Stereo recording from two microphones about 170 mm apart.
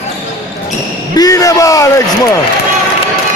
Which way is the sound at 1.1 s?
20° left (ahead or behind).